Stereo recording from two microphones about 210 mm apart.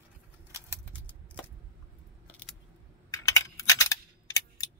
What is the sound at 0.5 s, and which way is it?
Keys jangling, 10° right (ahead or behind).